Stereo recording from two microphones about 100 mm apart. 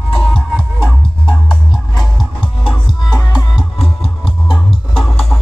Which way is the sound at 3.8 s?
70° left (ahead or behind).